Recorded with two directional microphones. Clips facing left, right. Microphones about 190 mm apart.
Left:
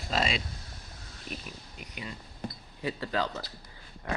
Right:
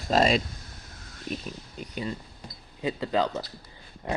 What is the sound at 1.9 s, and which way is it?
Speech, 35° right (ahead or behind).